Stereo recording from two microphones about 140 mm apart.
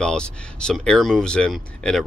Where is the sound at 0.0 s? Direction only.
5° left (ahead or behind).